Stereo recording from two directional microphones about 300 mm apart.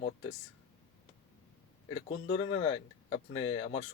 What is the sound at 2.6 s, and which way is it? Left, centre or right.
Speech, left.